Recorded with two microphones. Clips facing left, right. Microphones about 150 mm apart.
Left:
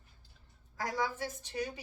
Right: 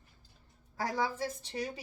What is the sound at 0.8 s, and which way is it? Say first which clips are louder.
A woman's voice: right 2 dB; 30° right (ahead or behind).